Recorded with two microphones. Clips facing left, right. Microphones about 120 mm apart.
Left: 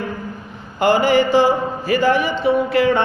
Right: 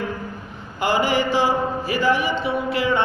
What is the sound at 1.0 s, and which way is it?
Speech, 50° left (ahead or behind).